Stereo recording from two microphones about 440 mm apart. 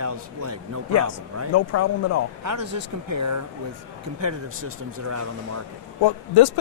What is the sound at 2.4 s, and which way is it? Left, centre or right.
Speech, right.